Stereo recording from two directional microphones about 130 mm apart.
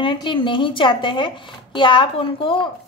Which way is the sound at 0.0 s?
40° left (ahead or behind).